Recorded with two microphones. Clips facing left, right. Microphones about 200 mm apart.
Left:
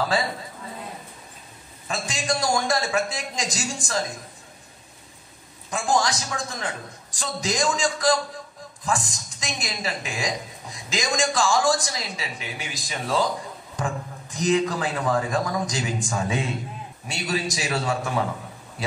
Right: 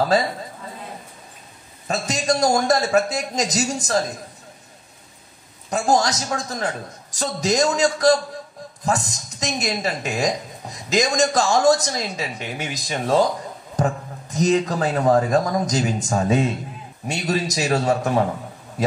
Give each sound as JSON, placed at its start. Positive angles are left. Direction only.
{"t": 1.9, "sound": "speech", "side_deg": -40}
{"t": 5.7, "sound": "speech", "side_deg": -40}